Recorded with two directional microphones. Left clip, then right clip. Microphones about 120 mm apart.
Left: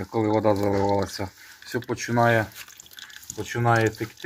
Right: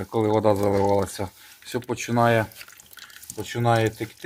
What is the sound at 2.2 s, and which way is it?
Speech, 35° right (ahead or behind).